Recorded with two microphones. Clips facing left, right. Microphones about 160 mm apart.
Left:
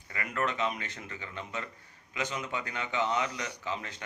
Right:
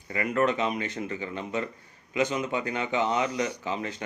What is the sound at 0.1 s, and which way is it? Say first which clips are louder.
Speech: right 8 dB; 20° right (ahead or behind).